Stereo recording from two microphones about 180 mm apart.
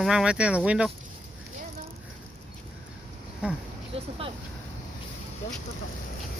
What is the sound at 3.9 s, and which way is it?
Vehicle, 30° right (ahead or behind).